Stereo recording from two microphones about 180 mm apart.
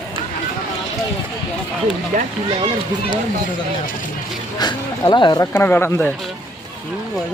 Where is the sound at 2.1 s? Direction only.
45° right (ahead or behind).